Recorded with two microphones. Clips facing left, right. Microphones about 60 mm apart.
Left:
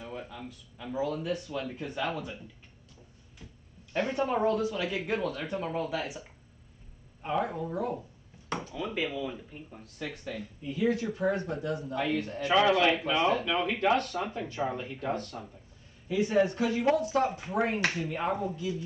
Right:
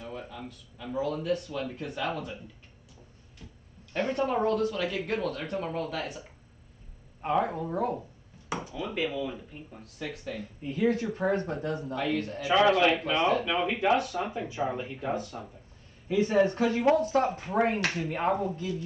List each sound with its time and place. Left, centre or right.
0.0 s speech: centre
4.1 s speech: centre
7.3 s speech: right
8.7 s speech: centre
10.6 s speech: right
11.9 s speech: centre
13.5 s speech: centre
16.1 s speech: right